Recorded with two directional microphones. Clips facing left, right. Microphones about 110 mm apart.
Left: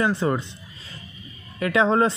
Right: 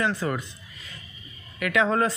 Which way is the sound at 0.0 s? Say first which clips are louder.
Left 4 dB; 25° left (ahead or behind).